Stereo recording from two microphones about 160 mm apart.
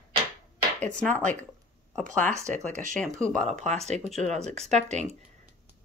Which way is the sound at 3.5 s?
45° right (ahead or behind).